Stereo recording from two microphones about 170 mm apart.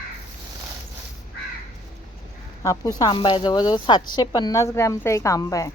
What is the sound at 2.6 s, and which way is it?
Speech, 20° left (ahead or behind).